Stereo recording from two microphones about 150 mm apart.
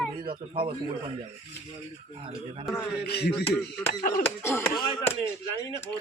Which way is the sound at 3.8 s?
70° left (ahead or behind).